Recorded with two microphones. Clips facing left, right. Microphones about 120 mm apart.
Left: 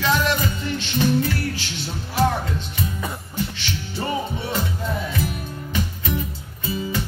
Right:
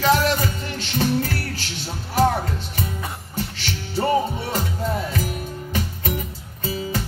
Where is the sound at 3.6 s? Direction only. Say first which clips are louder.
Right 3 dB; 40° right (ahead or behind).